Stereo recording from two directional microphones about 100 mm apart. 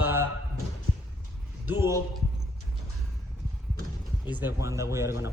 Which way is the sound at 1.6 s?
25° right (ahead or behind).